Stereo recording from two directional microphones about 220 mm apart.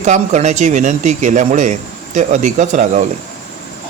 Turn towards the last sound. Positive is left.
turn(degrees=-35)  # may be behind; listen again after turning